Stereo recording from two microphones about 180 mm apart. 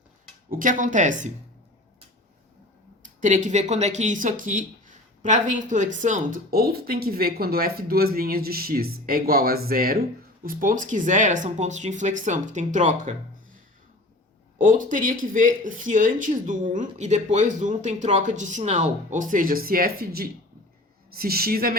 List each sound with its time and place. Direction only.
0.5 s speech: 50° right (ahead or behind)
3.0 s speech: 45° right (ahead or behind)
14.6 s a woman's voice: 50° right (ahead or behind)